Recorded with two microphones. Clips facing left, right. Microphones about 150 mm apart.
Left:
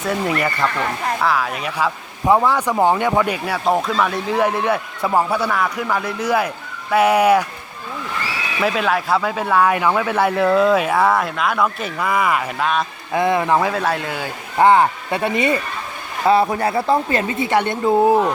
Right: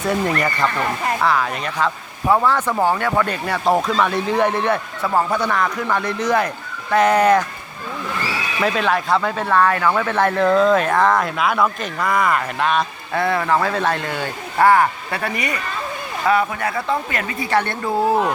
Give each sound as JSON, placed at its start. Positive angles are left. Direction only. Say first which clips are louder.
{"t": 0.0, "sound": "speech", "louder": "right 1 dB", "side_deg": 0}
{"t": 8.6, "sound": "speech", "louder": "even", "side_deg": 5}
{"t": 13.1, "sound": "speech", "louder": "left 2 dB", "side_deg": 15}
{"t": 14.6, "sound": "speech", "louder": "left 1 dB", "side_deg": 20}